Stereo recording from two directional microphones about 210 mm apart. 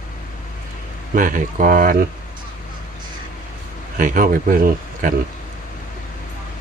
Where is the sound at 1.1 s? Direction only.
40° right (ahead or behind).